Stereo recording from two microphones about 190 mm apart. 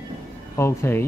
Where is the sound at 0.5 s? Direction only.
15° left (ahead or behind).